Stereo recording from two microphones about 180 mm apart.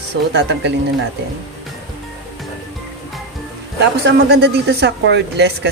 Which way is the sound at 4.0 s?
70° right (ahead or behind).